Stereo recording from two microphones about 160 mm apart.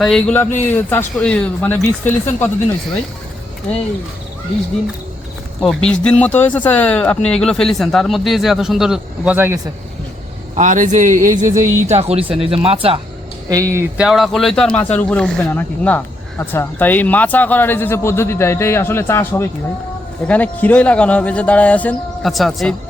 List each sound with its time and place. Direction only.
0.0 s speech: 5° left (ahead or behind)
5.5 s speech: 5° left (ahead or behind); by 9.6 s 10° right (ahead or behind)
10.5 s a man's voice: 50° right (ahead or behind)
11.4 s music: 20° right (ahead or behind)
11.9 s speech: 40° right (ahead or behind)
13.5 s music: 20° right (ahead or behind)
13.9 s speech: 5° right (ahead or behind)